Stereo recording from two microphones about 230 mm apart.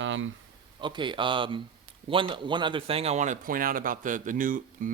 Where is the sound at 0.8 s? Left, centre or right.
Right.